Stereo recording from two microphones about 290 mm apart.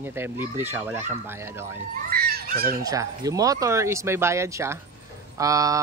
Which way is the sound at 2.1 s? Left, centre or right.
Right.